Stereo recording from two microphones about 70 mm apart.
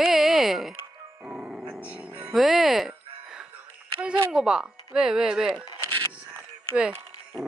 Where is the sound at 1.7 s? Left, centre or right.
Centre.